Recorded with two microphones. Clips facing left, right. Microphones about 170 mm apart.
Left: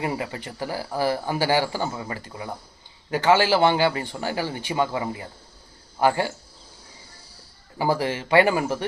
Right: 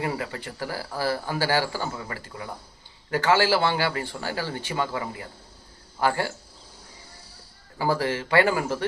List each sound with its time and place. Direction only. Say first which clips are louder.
0.0 s a man's voice: left 1 dB; 20° left (ahead or behind)
7.8 s a man's voice: left 1 dB; 15° left (ahead or behind)